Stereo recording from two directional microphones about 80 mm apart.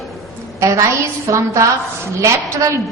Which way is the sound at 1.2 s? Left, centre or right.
Right.